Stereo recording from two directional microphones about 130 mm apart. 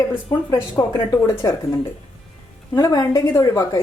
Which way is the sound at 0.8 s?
20° left (ahead or behind).